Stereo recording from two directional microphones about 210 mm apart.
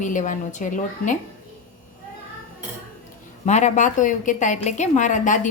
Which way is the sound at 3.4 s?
35° left (ahead or behind).